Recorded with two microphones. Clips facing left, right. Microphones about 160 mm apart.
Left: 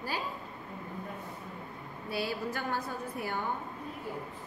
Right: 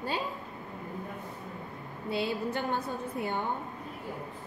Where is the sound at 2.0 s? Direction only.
20° right (ahead or behind).